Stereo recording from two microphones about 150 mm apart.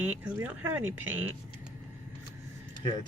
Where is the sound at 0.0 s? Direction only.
10° right (ahead or behind).